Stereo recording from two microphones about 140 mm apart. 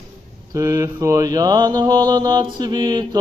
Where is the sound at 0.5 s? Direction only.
25° right (ahead or behind).